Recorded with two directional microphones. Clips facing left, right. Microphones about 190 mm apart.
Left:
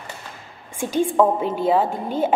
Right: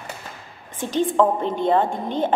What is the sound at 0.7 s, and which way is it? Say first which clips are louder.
A woman's voice: left 1 dB; 10° left (ahead or behind).